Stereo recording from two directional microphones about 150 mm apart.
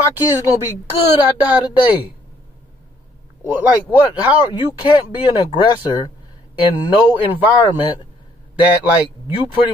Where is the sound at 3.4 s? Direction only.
10° right (ahead or behind).